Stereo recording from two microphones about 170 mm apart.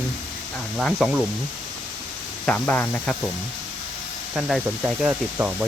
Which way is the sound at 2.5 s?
10° left (ahead or behind).